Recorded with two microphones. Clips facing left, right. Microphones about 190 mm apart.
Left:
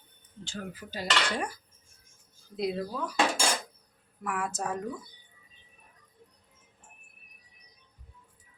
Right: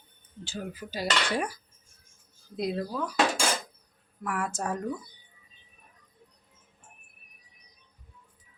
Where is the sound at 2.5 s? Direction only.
Centre (ahead or behind).